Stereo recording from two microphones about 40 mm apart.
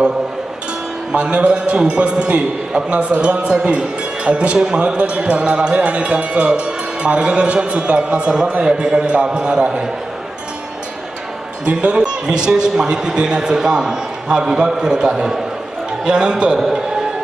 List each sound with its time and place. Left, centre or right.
1.1 s a man's voice: right
11.7 s a man's voice: right
16.5 s a man's voice: centre